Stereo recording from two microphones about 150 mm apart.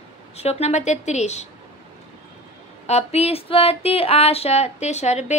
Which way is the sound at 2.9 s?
45° left (ahead or behind).